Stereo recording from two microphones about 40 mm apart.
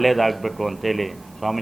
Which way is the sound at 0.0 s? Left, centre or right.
Centre.